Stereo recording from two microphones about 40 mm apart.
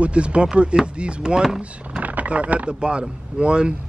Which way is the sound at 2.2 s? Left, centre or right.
Right.